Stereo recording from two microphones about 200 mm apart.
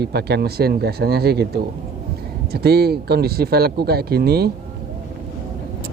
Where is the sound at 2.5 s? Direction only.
55° right (ahead or behind).